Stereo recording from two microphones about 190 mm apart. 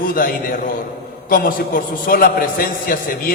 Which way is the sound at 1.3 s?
50° left (ahead or behind).